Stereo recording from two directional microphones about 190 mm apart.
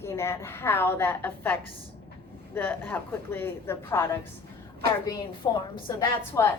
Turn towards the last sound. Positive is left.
turn(degrees=15)  # may be behind; listen again after turning